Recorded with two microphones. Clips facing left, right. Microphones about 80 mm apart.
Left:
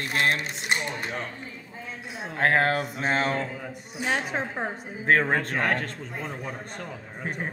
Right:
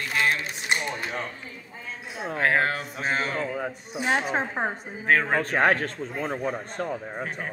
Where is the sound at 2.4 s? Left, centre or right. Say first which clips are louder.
Left 2 dB; left.